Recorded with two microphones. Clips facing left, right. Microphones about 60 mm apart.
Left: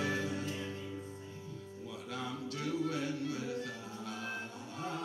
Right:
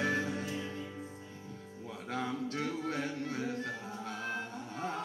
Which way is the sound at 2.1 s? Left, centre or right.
Right.